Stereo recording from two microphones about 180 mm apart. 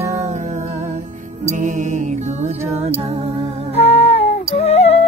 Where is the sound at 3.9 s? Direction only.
35° left (ahead or behind).